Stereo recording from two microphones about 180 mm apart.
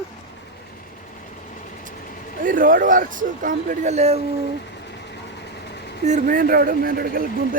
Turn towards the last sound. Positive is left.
turn(degrees=-55)  # may be behind; listen again after turning